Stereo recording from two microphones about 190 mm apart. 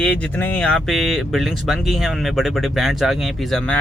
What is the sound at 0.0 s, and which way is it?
Speech, 5° left (ahead or behind).